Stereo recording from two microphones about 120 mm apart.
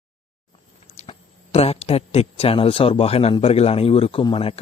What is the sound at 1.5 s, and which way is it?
A man's voice, 60° left (ahead or behind).